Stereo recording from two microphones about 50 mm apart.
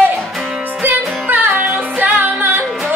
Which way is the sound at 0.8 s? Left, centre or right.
Right.